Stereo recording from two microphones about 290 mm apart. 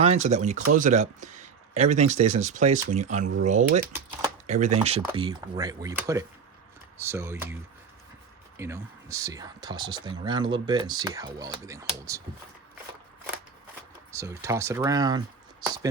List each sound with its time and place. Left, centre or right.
0.0 s speech: right
14.1 s speech: centre